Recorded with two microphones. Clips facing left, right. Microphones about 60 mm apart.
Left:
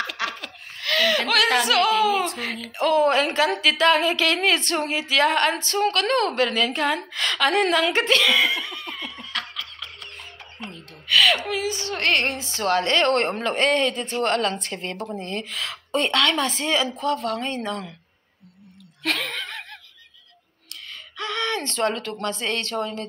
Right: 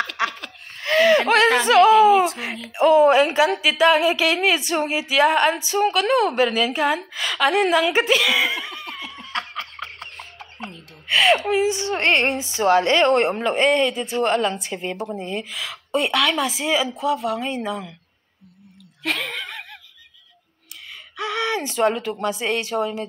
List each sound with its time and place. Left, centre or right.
0.2 s laughter: right
0.7 s speech: right
2.4 s a woman's voice: centre
8.8 s snicker: centre
9.2 s laughter: right
11.1 s a woman's voice: right; by 17.9 s centre
19.0 s chuckle: centre
21.2 s speech: centre